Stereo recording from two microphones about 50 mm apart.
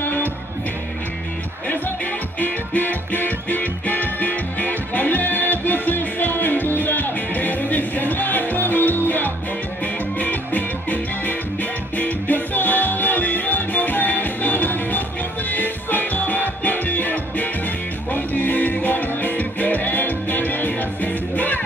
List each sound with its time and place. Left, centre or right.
0.0 s music: left
1.7 s music: left